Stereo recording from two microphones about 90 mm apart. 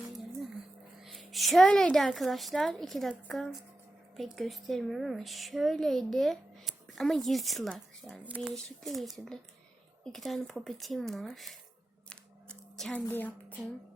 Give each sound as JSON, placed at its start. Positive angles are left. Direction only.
{"t": 1.0, "sound": "a woman's voice", "side_deg": 0}
{"t": 4.2, "sound": "a woman's voice", "side_deg": 0}
{"t": 12.0, "sound": "a sound", "side_deg": 5}
{"t": 13.1, "sound": "a woman's voice", "side_deg": 20}